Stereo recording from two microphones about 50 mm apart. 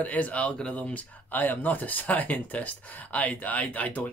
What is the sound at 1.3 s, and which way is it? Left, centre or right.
Speech, left.